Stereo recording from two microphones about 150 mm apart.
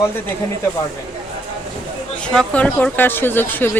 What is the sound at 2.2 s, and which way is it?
Speech, 5° left (ahead or behind).